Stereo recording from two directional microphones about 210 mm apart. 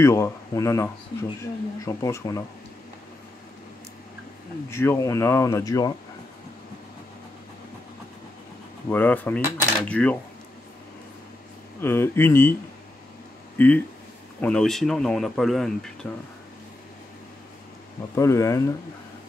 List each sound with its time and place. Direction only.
0.0 s speech: 15° left (ahead or behind)
4.6 s speech: 10° left (ahead or behind)
8.8 s speech: 10° left (ahead or behind)
11.8 s speech: 10° left (ahead or behind)
13.6 s speech: 5° left (ahead or behind)
18.1 s speech: 15° left (ahead or behind)